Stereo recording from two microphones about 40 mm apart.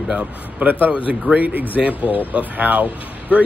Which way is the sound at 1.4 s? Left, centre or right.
Right.